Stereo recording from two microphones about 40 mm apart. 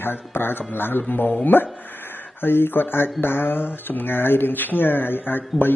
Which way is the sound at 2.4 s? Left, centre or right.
Left.